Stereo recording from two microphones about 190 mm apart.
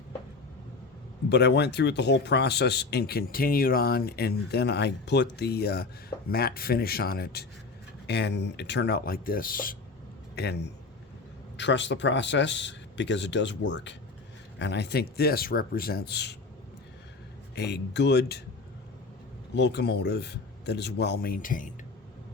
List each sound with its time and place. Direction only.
1.3 s speech: 60° left (ahead or behind)
11.5 s speech: 70° left (ahead or behind)
17.5 s speech: 60° left (ahead or behind)
19.5 s speech: 60° left (ahead or behind); by 21.7 s 45° left (ahead or behind)